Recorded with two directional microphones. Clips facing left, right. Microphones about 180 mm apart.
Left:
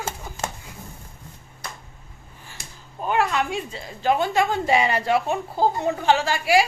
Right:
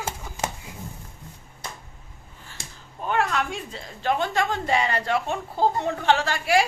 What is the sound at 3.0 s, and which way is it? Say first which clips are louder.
A woman's voice: left 2 dB; 5° left (ahead or behind).